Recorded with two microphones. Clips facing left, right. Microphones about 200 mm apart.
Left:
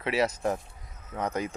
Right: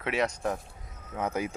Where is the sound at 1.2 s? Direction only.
10° right (ahead or behind).